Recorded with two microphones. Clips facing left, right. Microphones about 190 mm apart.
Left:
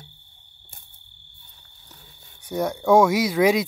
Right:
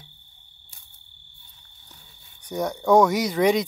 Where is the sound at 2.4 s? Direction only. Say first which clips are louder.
Left 2 dB; 5° left (ahead or behind).